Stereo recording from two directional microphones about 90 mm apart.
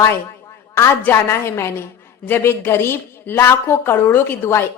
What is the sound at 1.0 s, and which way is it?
A woman's voice, 30° left (ahead or behind).